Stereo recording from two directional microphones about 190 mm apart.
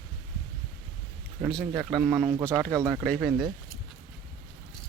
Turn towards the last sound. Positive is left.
turn(degrees=0)  # may be behind; listen again after turning